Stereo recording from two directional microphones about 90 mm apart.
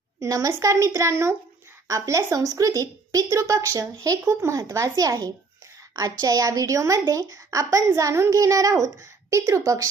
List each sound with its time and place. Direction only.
0.2 s a woman's voice: 35° right (ahead or behind)